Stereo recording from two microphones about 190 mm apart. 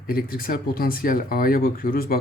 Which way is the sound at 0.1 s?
50° left (ahead or behind).